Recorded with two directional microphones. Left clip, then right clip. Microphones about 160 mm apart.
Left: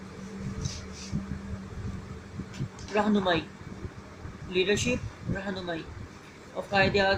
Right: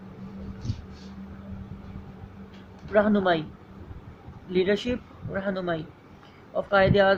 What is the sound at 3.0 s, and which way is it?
Speech, 50° right (ahead or behind).